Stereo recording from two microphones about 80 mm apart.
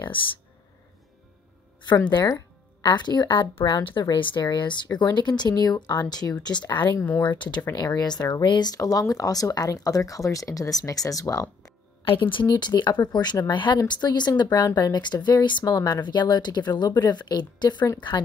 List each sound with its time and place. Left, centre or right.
2.2 s a woman's voice: left
7.2 s speech: left
7.7 s speech: left
8.7 s speech: left
12.0 s speech: left
13.7 s a woman's voice: left